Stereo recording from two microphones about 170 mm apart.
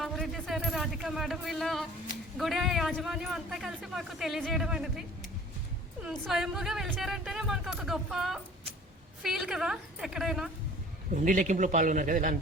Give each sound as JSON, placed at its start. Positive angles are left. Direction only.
{"t": 0.0, "sound": "a man's voice", "side_deg": 0}
{"t": 11.1, "sound": "a man's voice", "side_deg": -50}